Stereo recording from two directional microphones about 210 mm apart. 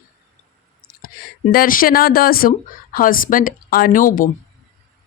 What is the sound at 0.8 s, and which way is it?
A woman's voice, 45° left (ahead or behind).